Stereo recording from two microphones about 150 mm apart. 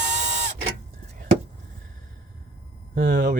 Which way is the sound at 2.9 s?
70° right (ahead or behind).